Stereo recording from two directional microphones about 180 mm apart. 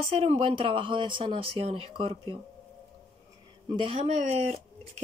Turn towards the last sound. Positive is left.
turn(degrees=-40)  # may be behind; listen again after turning